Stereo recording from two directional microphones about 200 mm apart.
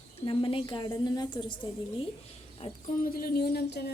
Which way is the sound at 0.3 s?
25° left (ahead or behind).